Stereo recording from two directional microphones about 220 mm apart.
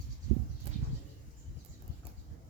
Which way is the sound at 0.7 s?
30° right (ahead or behind).